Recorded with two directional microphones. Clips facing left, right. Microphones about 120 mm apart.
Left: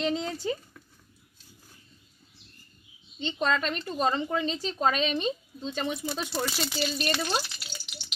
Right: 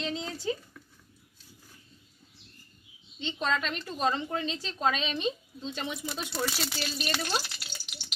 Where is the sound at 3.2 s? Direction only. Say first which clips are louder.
Left 3 dB; 40° left (ahead or behind).